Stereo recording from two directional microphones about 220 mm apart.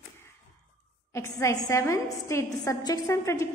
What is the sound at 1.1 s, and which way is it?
A woman's voice, 15° left (ahead or behind).